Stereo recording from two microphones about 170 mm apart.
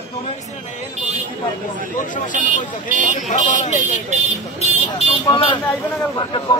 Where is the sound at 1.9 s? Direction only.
50° left (ahead or behind).